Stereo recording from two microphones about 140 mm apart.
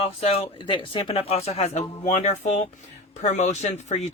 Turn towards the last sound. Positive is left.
turn(degrees=55)  # may be behind; listen again after turning